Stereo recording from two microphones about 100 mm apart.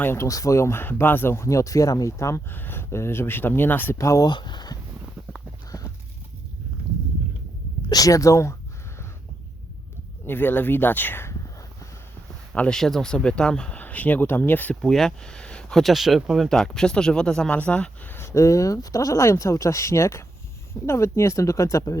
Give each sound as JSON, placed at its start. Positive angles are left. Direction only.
{"t": 0.0, "sound": "speech", "side_deg": 25}
{"t": 3.9, "sound": "speech", "side_deg": 30}
{"t": 4.3, "sound": "speech", "side_deg": 50}
{"t": 7.9, "sound": "speech", "side_deg": 35}
{"t": 10.2, "sound": "speech", "side_deg": 20}
{"t": 12.5, "sound": "speech", "side_deg": 10}
{"t": 14.8, "sound": "speech", "side_deg": 5}